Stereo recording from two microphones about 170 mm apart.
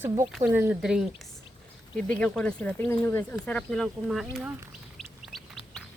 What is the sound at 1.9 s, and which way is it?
Speech, 5° left (ahead or behind).